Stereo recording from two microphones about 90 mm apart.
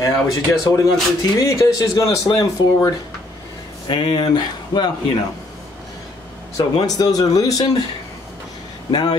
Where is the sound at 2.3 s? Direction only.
50° left (ahead or behind).